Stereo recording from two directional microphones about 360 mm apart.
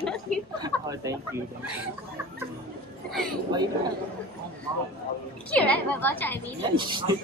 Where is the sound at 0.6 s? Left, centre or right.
Centre.